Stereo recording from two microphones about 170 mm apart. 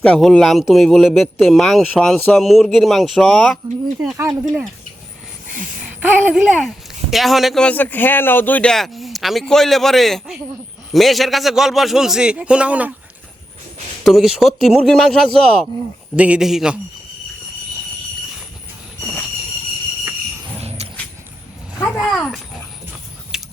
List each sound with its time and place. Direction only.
0.0 s a man's voice: 5° left (ahead or behind)
5.8 s a man's voice: 10° right (ahead or behind)
14.0 s a man's voice: centre (ahead or behind)
20.6 s dog: 35° right (ahead or behind)
21.9 s a man's voice: centre (ahead or behind)
23.3 s a sound: centre (ahead or behind)